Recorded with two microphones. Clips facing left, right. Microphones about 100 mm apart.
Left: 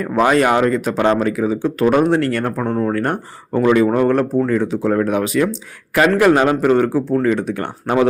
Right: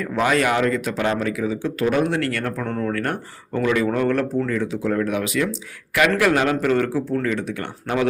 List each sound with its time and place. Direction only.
0.0 s speech: 35° left (ahead or behind)